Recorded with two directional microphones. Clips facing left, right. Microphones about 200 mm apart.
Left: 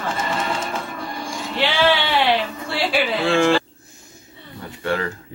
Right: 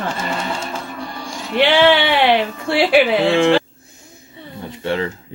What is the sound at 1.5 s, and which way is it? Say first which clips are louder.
Speech: right 6 dB; 60° right (ahead or behind).